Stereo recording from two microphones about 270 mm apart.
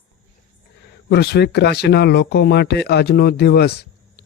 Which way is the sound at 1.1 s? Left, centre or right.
Left.